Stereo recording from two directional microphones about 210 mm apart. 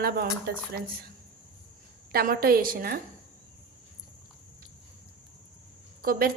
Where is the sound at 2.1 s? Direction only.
45° right (ahead or behind).